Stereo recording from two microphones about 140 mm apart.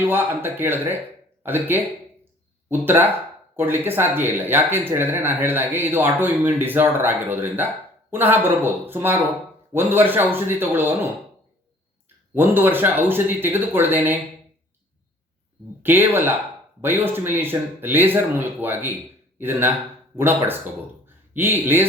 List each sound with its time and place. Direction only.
0.0 s speech: 15° right (ahead or behind)
12.0 s speech: 15° right (ahead or behind)
15.8 s speech: 15° right (ahead or behind)